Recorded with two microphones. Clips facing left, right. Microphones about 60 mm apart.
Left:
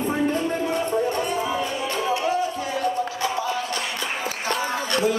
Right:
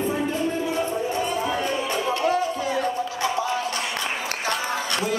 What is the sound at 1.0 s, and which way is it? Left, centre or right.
Music, left.